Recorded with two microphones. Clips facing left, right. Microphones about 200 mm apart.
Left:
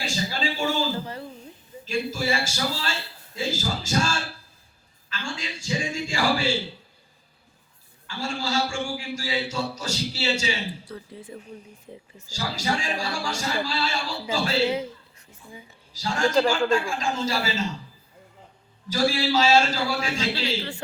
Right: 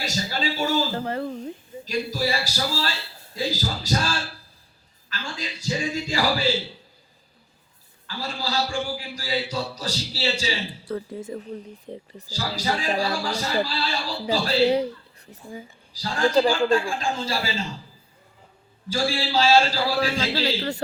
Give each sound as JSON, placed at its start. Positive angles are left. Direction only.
{"t": 0.0, "sound": "a man's voice", "side_deg": -40}
{"t": 0.9, "sound": "speech", "side_deg": -60}
{"t": 1.8, "sound": "speech", "side_deg": -40}
{"t": 8.0, "sound": "speech", "side_deg": -35}
{"t": 10.8, "sound": "a woman's voice", "side_deg": -50}
{"t": 16.3, "sound": "a man's voice", "side_deg": -5}
{"t": 16.6, "sound": "speech", "side_deg": -30}
{"t": 18.9, "sound": "speech", "side_deg": -30}